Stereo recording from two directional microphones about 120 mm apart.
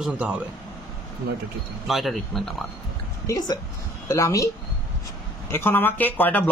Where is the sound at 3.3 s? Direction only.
30° left (ahead or behind).